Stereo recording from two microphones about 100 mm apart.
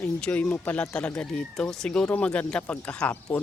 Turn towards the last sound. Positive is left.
turn(degrees=15)  # may be behind; listen again after turning